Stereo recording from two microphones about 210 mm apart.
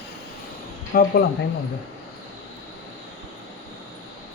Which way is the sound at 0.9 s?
45° left (ahead or behind).